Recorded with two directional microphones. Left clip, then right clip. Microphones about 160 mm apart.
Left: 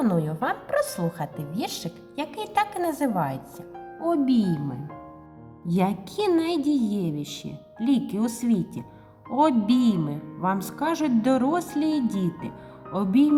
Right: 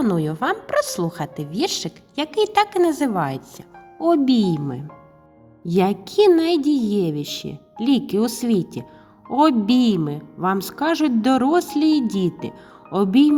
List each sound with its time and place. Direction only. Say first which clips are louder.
0.0 s speech: right 4 dB; 30° right (ahead or behind)